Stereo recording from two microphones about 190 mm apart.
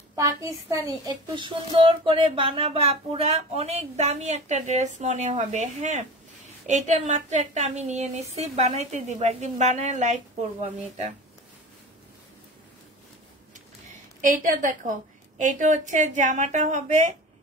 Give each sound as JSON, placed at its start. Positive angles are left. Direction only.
{"t": 0.1, "sound": "speech", "side_deg": -15}
{"t": 14.2, "sound": "speech", "side_deg": -45}